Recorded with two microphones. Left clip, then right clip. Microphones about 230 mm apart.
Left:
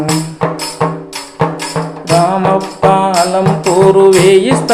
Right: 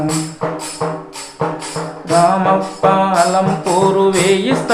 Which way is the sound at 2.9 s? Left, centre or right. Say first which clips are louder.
Left 1 dB; left.